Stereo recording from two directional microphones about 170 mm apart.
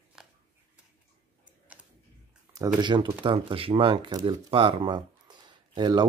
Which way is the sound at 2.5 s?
25° right (ahead or behind).